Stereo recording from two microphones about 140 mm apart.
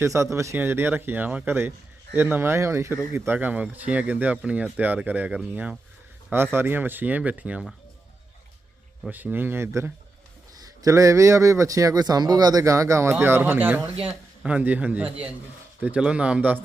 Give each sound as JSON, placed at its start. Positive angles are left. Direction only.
{"t": 0.0, "sound": "speech", "side_deg": -20}
{"t": 9.0, "sound": "a man's voice", "side_deg": -15}